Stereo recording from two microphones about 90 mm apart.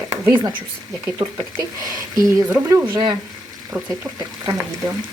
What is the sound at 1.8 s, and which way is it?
Speech, 45° right (ahead or behind).